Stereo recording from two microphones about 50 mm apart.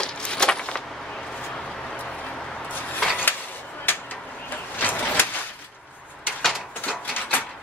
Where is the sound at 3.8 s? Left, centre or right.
Left.